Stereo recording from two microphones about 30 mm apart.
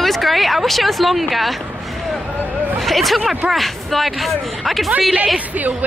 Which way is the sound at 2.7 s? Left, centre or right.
Centre.